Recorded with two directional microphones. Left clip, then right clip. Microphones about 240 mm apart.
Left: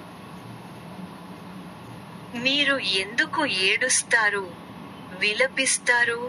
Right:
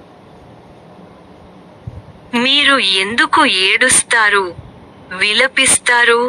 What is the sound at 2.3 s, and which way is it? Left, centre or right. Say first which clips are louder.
A woman's voice: right 11 dB; right.